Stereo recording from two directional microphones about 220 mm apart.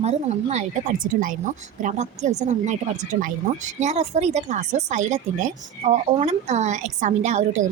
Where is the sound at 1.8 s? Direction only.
35° right (ahead or behind).